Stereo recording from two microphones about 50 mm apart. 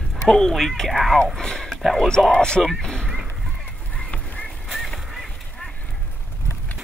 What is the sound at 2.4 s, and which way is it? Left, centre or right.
Speech, centre.